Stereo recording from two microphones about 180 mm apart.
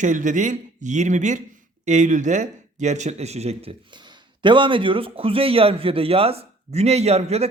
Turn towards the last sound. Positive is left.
turn(degrees=-35)  # may be behind; listen again after turning